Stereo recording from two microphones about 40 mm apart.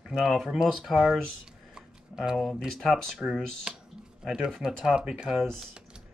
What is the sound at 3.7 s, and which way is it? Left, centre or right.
Speech, centre.